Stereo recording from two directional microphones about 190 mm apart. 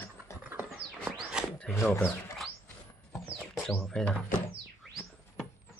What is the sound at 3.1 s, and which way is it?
Music, centre (ahead or behind).